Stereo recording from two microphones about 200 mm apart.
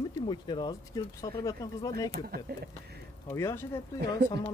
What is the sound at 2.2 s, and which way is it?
Speech, 50° right (ahead or behind).